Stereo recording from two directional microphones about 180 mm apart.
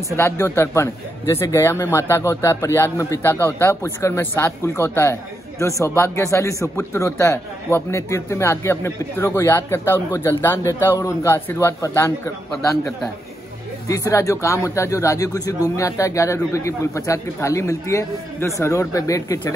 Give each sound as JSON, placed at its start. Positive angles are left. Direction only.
{"t": 0.2, "sound": "speech", "side_deg": 15}
{"t": 13.8, "sound": "speech", "side_deg": 15}